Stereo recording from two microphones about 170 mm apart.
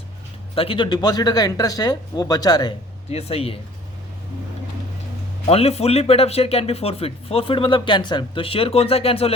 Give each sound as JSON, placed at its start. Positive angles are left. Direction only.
{"t": 0.5, "sound": "speech", "side_deg": 30}
{"t": 3.1, "sound": "speech", "side_deg": 35}
{"t": 5.5, "sound": "speech", "side_deg": 35}